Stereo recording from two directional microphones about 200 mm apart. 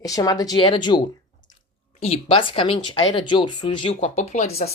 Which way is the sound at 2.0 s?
30° left (ahead or behind).